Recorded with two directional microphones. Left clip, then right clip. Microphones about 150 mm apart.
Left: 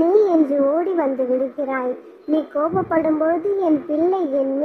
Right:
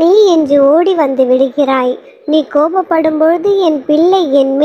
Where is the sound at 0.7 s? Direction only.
35° right (ahead or behind).